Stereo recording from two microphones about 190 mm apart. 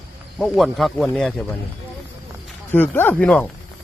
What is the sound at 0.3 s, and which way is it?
Speech, centre (ahead or behind).